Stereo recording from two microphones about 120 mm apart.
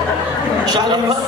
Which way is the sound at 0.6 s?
35° right (ahead or behind).